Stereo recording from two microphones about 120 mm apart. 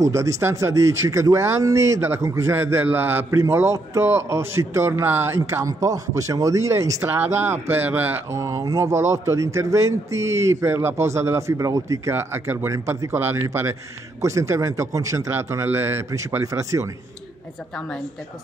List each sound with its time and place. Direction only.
0.0 s speech: 25° right (ahead or behind)